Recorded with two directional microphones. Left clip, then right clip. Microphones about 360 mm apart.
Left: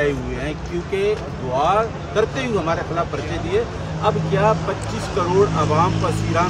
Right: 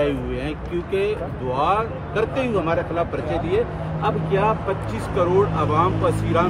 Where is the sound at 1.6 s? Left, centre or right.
Centre.